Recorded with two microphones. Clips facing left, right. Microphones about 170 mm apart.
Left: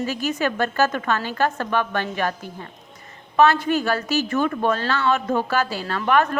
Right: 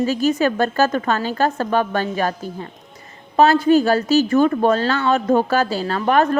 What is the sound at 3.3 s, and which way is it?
A woman's voice, 35° right (ahead or behind).